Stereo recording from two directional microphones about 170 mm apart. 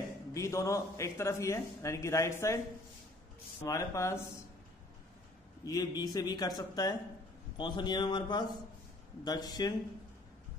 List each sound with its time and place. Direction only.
0.3 s a man's voice: 20° left (ahead or behind)
3.6 s a man's voice: 20° left (ahead or behind)
5.7 s a man's voice: 20° left (ahead or behind)